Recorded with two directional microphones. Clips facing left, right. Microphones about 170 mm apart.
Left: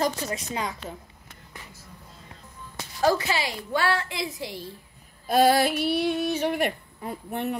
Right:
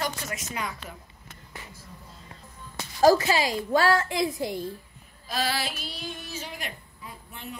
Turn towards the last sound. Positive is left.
turn(degrees=60)  # may be behind; listen again after turning